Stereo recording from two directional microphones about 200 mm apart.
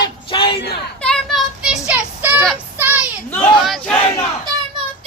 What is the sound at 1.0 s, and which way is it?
Children playing, 5° left (ahead or behind).